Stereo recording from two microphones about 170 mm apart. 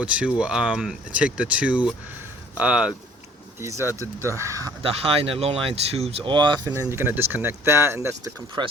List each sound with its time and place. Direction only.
0.0 s speech: 5° right (ahead or behind)
4.8 s speech: 35° right (ahead or behind)